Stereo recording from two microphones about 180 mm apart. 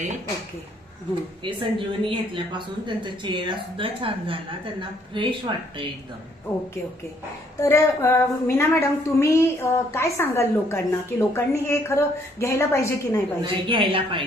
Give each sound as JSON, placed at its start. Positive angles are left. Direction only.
{"t": 1.5, "sound": "a woman's voice", "side_deg": -30}
{"t": 7.6, "sound": "a woman's voice", "side_deg": 15}
{"t": 13.4, "sound": "a woman's voice", "side_deg": -25}